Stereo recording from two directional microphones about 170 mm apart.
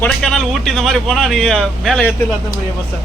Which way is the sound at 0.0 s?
5° left (ahead or behind).